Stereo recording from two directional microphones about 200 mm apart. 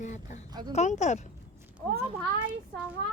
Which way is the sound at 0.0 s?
35° left (ahead or behind).